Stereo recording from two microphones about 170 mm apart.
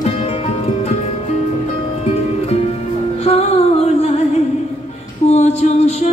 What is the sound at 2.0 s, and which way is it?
Music, 40° left (ahead or behind).